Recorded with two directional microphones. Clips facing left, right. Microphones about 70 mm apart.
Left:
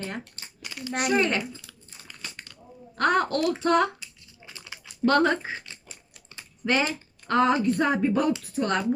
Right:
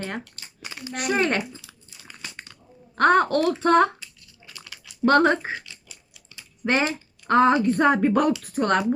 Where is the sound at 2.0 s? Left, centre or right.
Right.